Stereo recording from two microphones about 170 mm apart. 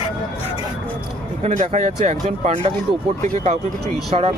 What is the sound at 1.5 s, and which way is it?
Speech, 45° right (ahead or behind).